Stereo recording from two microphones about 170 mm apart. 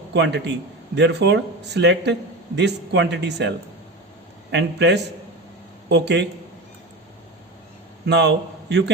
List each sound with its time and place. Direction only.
0.1 s speech: 90° right
4.5 s speech: 90° right
8.0 s a man's voice: 90° right